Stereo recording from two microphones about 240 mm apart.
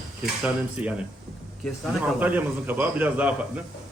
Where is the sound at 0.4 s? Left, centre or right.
Centre.